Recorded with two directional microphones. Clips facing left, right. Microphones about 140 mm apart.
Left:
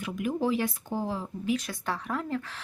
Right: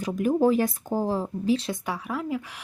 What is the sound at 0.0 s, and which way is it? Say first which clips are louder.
Speech: right 7 dB; 40° right (ahead or behind).